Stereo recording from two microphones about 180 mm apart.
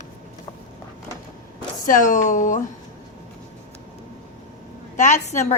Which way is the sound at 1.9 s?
45° left (ahead or behind).